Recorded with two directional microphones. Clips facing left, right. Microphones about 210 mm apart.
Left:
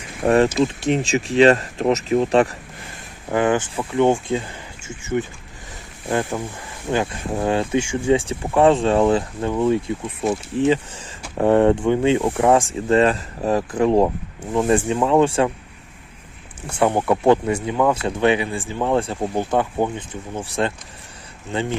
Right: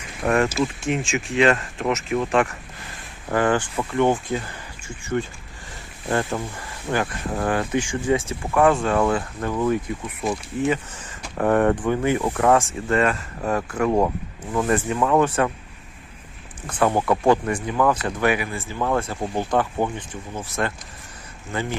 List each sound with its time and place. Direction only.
0.2 s speech: 30° left (ahead or behind)
0.4 s speech: 20° left (ahead or behind)
0.8 s speech: 35° left (ahead or behind)
3.3 s speech: 20° left (ahead or behind)
6.1 s speech: 15° left (ahead or behind)
11.3 s speech: 20° left (ahead or behind)
12.9 s speech: 35° left (ahead or behind)
16.8 s speech: 20° left (ahead or behind)